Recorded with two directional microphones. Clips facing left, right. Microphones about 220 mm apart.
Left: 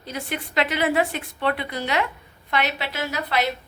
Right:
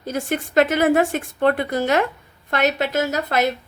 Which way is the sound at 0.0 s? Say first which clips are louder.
Right 7 dB; 45° right (ahead or behind).